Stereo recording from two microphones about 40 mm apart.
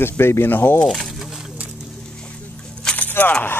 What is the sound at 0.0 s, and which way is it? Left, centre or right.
Speech, left.